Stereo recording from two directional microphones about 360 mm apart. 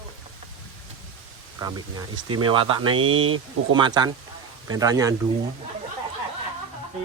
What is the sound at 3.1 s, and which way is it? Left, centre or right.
Speech, right.